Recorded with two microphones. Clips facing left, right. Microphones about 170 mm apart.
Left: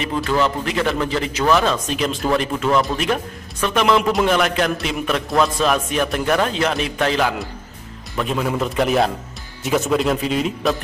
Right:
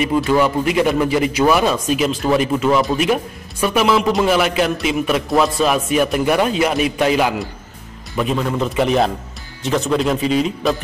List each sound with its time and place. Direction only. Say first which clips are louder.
0.0 s a man's voice: right 4 dB; 10° right (ahead or behind)
8.2 s a man's voice: right 2 dB; centre (ahead or behind)